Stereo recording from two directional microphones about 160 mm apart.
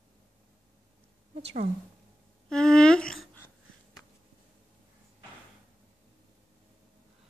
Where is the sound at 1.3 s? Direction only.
45° right (ahead or behind).